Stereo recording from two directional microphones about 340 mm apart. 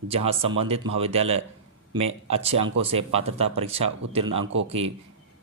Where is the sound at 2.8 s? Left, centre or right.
Centre.